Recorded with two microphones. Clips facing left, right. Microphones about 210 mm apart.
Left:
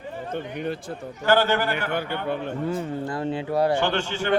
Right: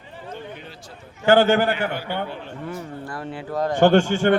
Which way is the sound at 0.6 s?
55° left (ahead or behind).